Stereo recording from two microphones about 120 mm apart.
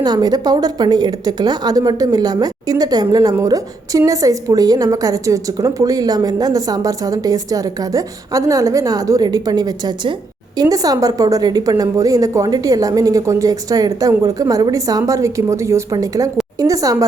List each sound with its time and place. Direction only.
0.0 s a woman's voice: 35° right (ahead or behind)